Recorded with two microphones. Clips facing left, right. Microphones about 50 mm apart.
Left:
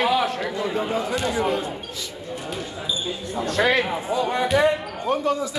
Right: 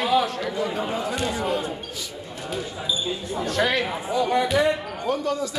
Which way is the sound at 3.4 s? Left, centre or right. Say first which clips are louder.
Left 3 dB; left.